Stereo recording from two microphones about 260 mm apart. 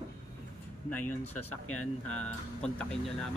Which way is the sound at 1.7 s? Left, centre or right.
Left.